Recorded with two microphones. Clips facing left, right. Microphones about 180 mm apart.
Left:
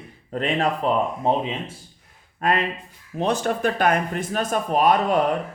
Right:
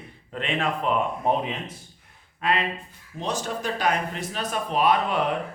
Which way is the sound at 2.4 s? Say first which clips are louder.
Left 3 dB; 45° left (ahead or behind).